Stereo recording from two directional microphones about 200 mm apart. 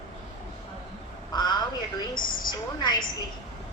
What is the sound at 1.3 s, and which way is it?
Speech, 20° left (ahead or behind).